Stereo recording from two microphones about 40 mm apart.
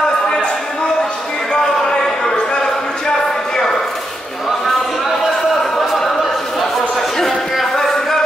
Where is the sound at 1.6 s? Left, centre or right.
Centre.